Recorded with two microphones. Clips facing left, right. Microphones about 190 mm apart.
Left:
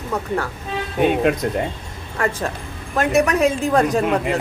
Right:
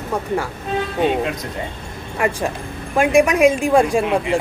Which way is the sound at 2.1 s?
15° right (ahead or behind).